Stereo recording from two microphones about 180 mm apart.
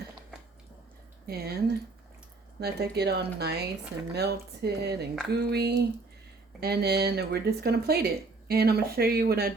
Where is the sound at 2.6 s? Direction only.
60° right (ahead or behind).